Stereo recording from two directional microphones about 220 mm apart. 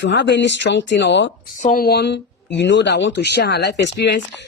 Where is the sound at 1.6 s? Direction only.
40° left (ahead or behind).